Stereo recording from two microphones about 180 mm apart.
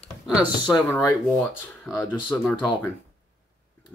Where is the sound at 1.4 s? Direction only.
15° left (ahead or behind).